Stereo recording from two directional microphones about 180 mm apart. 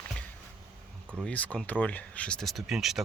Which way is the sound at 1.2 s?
10° left (ahead or behind).